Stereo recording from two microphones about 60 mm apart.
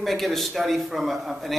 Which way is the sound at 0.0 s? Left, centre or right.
Centre.